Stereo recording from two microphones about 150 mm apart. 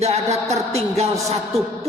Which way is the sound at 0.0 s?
45° right (ahead or behind).